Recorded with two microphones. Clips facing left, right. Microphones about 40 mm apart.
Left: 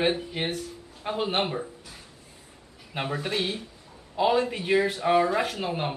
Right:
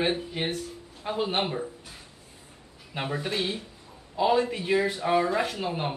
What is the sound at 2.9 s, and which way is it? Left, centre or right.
Speech, centre.